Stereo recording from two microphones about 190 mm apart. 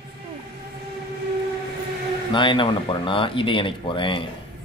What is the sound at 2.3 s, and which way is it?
Speech, 25° left (ahead or behind).